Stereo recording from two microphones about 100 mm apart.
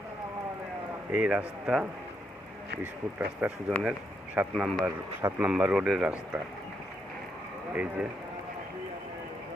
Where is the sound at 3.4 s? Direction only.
15° right (ahead or behind).